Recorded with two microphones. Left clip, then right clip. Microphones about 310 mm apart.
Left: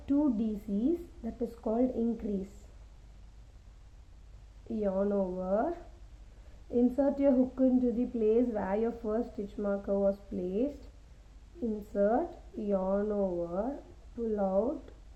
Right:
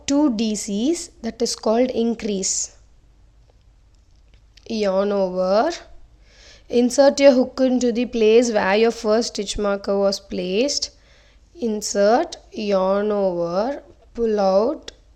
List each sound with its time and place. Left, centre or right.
0.0 s a woman's voice: right
4.7 s a woman's voice: right
11.9 s a woman's voice: right